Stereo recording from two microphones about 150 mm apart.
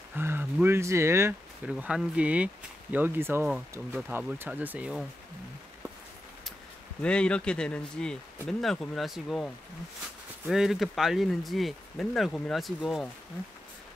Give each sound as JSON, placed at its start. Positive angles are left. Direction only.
{"t": 0.1, "sound": "speech", "side_deg": -15}
{"t": 1.7, "sound": "speech", "side_deg": -5}
{"t": 7.0, "sound": "speech", "side_deg": 5}
{"t": 10.5, "sound": "speech", "side_deg": 0}